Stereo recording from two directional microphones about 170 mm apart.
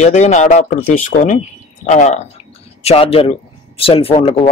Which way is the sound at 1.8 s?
45° left (ahead or behind).